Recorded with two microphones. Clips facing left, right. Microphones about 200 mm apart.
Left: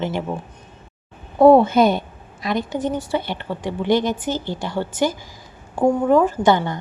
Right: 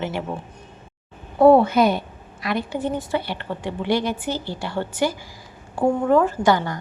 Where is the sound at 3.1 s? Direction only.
20° left (ahead or behind).